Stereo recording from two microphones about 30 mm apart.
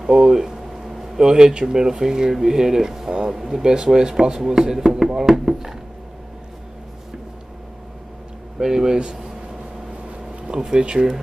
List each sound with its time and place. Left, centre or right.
0.0 s a sound: centre
0.8 s a sound: centre
1.1 s speech: right
3.1 s speech: right
3.3 s speech: centre
4.2 s speech: centre
8.6 s speech: right
10.4 s speech: right